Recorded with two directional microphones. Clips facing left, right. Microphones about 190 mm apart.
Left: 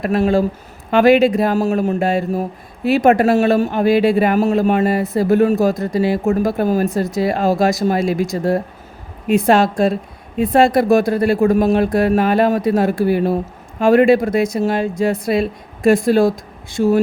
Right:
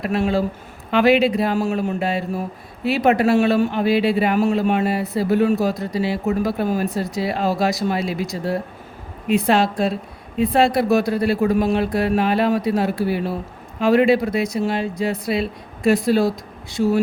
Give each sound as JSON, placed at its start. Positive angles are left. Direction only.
{"t": 0.0, "sound": "a woman's voice", "side_deg": 45}